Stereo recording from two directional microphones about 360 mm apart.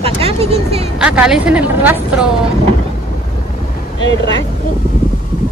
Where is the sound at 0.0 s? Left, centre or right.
Centre.